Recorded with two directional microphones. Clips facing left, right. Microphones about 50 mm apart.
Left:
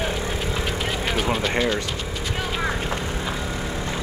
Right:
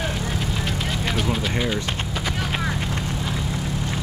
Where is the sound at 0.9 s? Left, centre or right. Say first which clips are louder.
Left 1 dB; centre.